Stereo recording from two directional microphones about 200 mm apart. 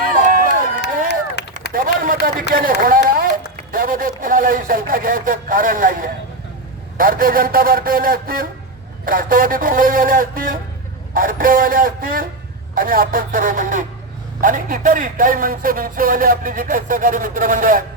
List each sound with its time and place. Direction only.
0.2 s run: 40° right (ahead or behind)
1.0 s run: 55° left (ahead or behind)
1.7 s a man's voice: 45° right (ahead or behind)